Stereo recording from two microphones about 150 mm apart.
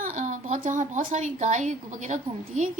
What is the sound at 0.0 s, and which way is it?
Speech, 55° right (ahead or behind).